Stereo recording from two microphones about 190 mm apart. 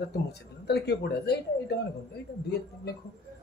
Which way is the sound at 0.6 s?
60° left (ahead or behind).